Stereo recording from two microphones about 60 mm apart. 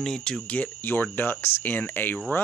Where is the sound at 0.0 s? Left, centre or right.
Centre.